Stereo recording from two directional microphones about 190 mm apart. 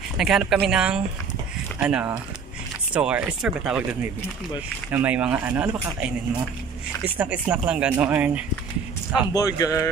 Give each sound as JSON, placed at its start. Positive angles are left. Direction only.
{"t": 0.2, "sound": "speech", "side_deg": -5}
{"t": 9.3, "sound": "speech", "side_deg": 20}